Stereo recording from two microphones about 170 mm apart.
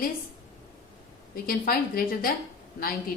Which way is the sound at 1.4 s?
60° left (ahead or behind).